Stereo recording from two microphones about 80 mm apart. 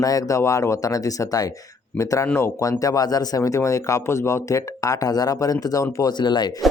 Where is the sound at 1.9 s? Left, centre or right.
Left.